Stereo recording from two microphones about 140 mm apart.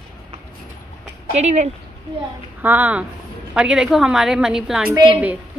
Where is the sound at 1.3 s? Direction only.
55° right (ahead or behind).